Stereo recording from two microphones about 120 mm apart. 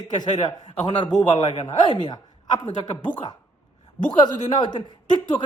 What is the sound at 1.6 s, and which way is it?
Speech, 35° left (ahead or behind).